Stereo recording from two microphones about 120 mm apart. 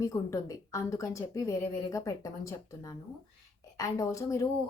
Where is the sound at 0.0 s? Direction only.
25° left (ahead or behind).